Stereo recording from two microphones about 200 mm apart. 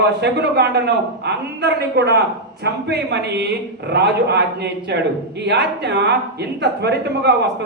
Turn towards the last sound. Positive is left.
turn(degrees=-55)  # may be behind; listen again after turning